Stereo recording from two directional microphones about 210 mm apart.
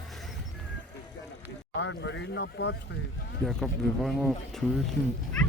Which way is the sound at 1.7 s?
55° left (ahead or behind).